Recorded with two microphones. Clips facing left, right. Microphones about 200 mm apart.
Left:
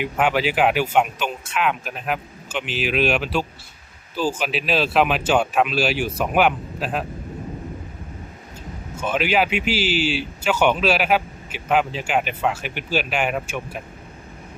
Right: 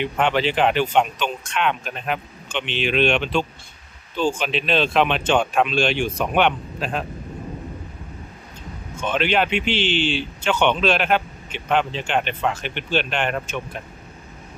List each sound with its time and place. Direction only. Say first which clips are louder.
0.0 s speech: even; 5° left (ahead or behind)
9.0 s speech: even; 5° left (ahead or behind)